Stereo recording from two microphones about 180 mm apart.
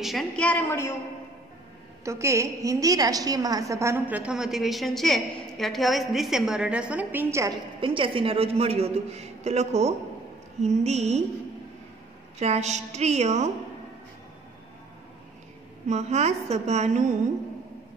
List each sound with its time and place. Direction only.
0.0 s a woman's voice: centre (ahead or behind)
2.0 s a woman's voice: 15° right (ahead or behind)
7.8 s a man's voice: 30° right (ahead or behind)
12.4 s a man's voice: 40° right (ahead or behind)
15.9 s a man's voice: 40° right (ahead or behind)